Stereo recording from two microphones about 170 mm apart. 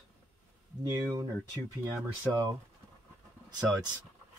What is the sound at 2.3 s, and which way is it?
Speech, 25° right (ahead or behind).